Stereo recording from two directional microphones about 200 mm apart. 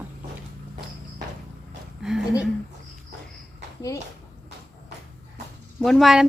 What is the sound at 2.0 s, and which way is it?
Speech, 5° right (ahead or behind).